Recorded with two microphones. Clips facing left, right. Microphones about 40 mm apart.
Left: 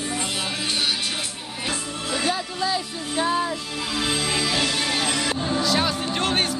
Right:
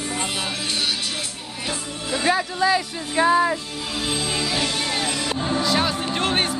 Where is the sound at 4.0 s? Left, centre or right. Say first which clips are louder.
Left 1 dB; left.